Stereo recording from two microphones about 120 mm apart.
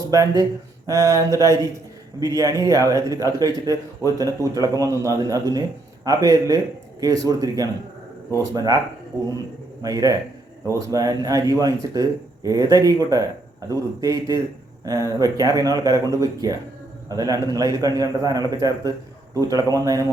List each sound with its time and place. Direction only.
0.0 s a man's voice: 30° right (ahead or behind)
9.8 s a man's voice: 30° right (ahead or behind)